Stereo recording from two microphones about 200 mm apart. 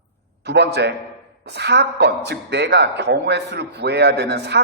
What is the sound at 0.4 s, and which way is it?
A woman's voice, 55° right (ahead or behind).